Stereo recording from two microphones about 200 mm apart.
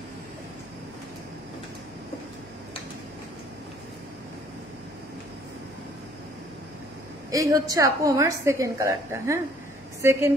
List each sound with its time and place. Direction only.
7.2 s a woman's voice: 15° right (ahead or behind)